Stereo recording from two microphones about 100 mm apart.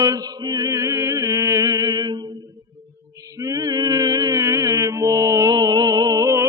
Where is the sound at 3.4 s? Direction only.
35° right (ahead or behind).